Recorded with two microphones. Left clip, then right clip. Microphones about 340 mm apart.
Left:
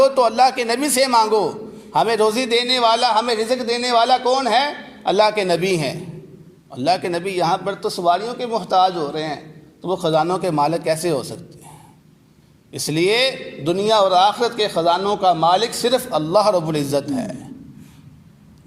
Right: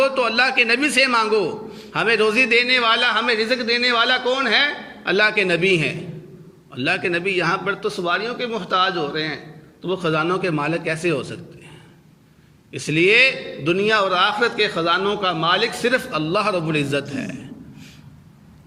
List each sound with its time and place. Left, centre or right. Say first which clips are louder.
0.0 s a man's voice: left 4 dB; centre
12.7 s a man's voice: right 3 dB; centre